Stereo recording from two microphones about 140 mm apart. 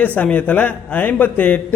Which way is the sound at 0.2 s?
10° left (ahead or behind).